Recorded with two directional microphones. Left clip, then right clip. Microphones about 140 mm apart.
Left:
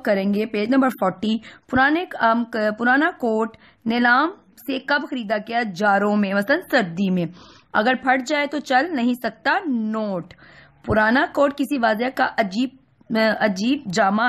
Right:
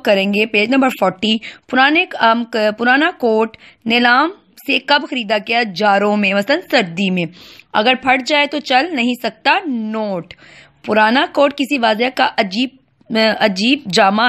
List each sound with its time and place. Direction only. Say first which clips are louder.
0.0 s speech: right 7 dB; 20° right (ahead or behind)